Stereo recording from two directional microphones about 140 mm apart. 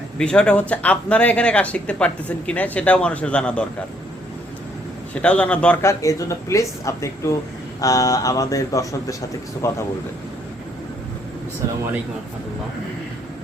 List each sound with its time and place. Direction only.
0.2 s speech: 5° left (ahead or behind)
5.1 s speech: 10° left (ahead or behind)
5.8 s speech: 20° left (ahead or behind)